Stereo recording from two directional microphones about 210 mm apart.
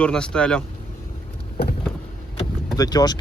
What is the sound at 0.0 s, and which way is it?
Speech, 5° left (ahead or behind).